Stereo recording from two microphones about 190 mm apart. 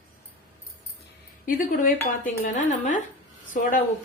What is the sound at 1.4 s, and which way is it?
A woman's voice, 50° left (ahead or behind).